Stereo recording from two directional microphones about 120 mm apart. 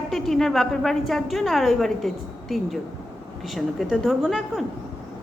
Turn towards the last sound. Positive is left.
turn(degrees=0)  # may be behind; listen again after turning